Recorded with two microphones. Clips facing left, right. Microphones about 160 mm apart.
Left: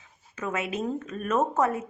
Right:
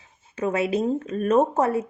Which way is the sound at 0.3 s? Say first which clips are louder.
Right 7 dB; 35° right (ahead or behind).